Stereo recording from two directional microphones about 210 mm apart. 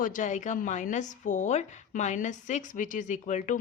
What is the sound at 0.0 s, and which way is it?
A woman's voice, 40° left (ahead or behind).